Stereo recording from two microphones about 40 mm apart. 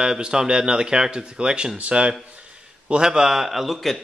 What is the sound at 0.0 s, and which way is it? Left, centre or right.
Speech, centre.